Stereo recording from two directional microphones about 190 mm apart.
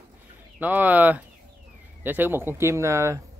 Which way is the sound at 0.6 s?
10° right (ahead or behind).